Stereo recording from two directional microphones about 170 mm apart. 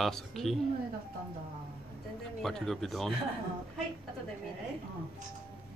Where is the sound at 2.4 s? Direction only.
Centre (ahead or behind).